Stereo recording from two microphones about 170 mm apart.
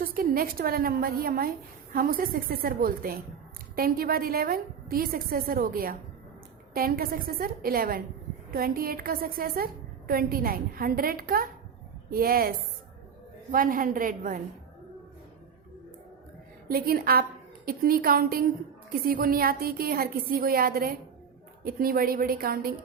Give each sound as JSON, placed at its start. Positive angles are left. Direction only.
{"t": 0.0, "sound": "a woman's voice", "side_deg": -60}
{"t": 16.6, "sound": "a woman's voice", "side_deg": -60}